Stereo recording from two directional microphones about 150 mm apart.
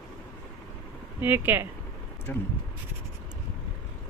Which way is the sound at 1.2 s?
15° right (ahead or behind).